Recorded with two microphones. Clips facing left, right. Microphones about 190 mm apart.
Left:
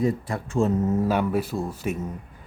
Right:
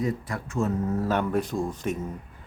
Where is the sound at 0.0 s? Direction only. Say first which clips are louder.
Left 4 dB; 25° left (ahead or behind).